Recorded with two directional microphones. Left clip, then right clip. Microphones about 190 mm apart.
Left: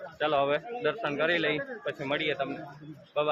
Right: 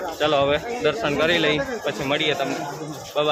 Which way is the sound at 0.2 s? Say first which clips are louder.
Right 7 dB; 10° right (ahead or behind).